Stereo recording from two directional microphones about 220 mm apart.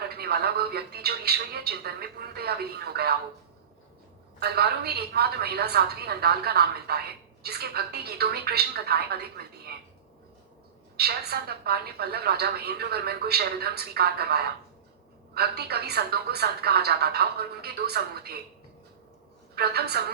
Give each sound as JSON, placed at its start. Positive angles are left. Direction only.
{"t": 0.1, "sound": "a woman's voice", "side_deg": -45}
{"t": 4.4, "sound": "a woman's voice", "side_deg": -45}
{"t": 10.9, "sound": "a woman's voice", "side_deg": -45}
{"t": 19.5, "sound": "a woman's voice", "side_deg": -45}